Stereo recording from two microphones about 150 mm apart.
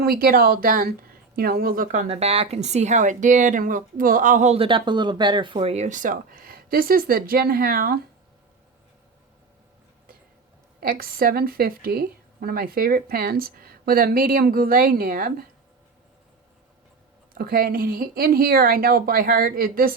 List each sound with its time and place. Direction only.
0.0 s speech: 85° right; by 4.5 s 60° right (ahead or behind)
4.5 s speech: 35° right (ahead or behind); by 7.9 s 80° right
10.8 s a woman's voice: 75° right (ahead or behind)
17.3 s a woman's voice: 80° right